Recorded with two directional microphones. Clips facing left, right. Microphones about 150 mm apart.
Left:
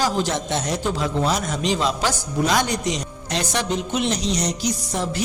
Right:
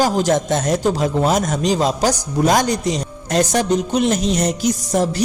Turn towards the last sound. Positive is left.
turn(degrees=-45)  # may be behind; listen again after turning